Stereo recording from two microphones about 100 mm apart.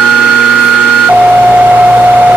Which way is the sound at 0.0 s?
5° right (ahead or behind).